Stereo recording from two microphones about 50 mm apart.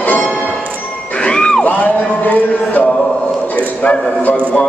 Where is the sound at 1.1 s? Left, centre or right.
Centre.